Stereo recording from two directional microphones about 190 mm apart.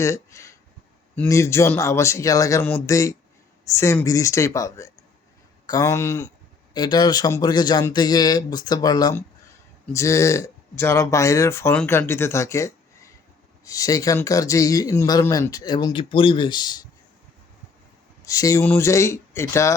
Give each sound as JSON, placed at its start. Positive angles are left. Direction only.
{"t": 0.0, "sound": "speech", "side_deg": 15}
{"t": 18.3, "sound": "speech", "side_deg": 15}